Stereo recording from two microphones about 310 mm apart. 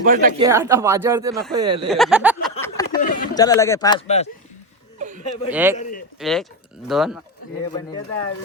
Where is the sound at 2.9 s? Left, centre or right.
Left.